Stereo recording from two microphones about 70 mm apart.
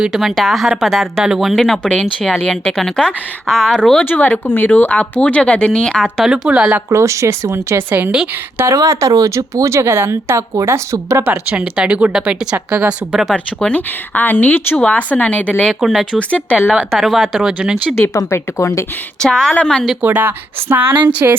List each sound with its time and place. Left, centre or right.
0.0 s speech: centre
4.0 s speech: left; by 6.2 s centre
6.2 s speech: centre
6.9 s speech: right
8.7 s speech: right
11.2 s speech: right
13.3 s speech: centre
15.8 s speech: centre
16.1 s speech: centre
16.9 s speech: centre
17.6 s speech: centre
18.3 s speech: left
19.2 s speech: centre
20.0 s speech: right